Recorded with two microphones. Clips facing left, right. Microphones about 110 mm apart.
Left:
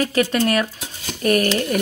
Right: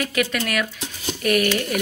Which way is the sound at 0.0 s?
35° left (ahead or behind).